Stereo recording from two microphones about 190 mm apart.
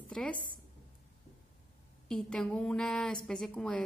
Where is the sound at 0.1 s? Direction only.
5° left (ahead or behind).